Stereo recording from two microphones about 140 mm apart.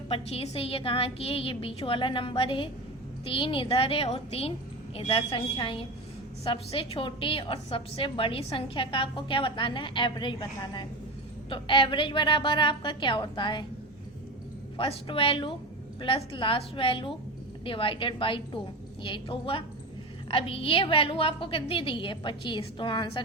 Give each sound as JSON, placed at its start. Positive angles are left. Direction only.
{"t": 0.1, "sound": "a woman's voice", "side_deg": 45}
{"t": 14.8, "sound": "a woman's voice", "side_deg": 40}